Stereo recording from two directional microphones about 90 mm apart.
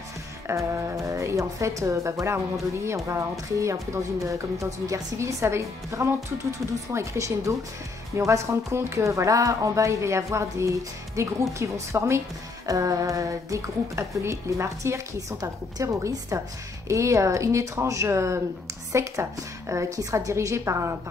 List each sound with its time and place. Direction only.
0.5 s speech: 35° right (ahead or behind)